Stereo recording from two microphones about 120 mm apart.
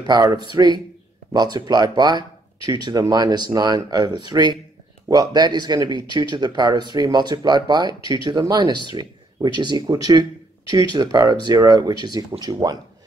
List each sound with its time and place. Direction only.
0.0 s speech: 35° right (ahead or behind)